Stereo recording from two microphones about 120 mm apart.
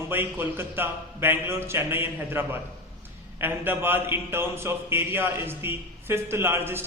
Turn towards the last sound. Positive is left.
turn(degrees=-20)  # may be behind; listen again after turning